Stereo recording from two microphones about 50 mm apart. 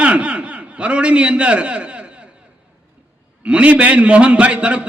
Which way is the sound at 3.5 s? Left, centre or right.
Right.